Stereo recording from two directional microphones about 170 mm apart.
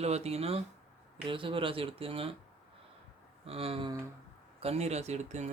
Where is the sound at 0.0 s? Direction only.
40° right (ahead or behind).